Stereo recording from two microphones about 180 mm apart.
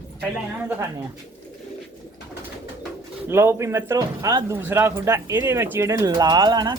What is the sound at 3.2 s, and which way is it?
Speech, 15° right (ahead or behind).